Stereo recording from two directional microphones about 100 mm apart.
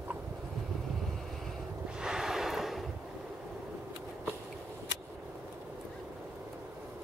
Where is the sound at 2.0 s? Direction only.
5° right (ahead or behind).